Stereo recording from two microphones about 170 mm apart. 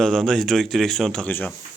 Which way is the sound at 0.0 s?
5° left (ahead or behind).